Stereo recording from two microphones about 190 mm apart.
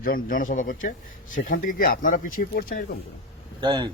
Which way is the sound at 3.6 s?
20° right (ahead or behind).